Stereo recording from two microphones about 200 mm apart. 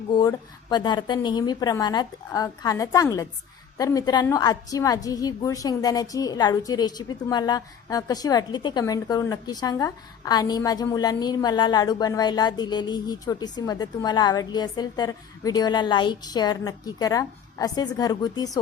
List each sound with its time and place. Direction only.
0.1 s a woman's voice: 20° left (ahead or behind)